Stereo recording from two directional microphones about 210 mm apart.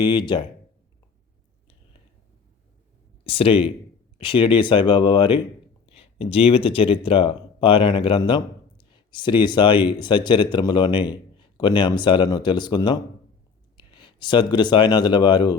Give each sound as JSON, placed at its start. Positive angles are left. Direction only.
{"t": 0.0, "sound": "speech", "side_deg": 20}
{"t": 3.2, "sound": "speech", "side_deg": 25}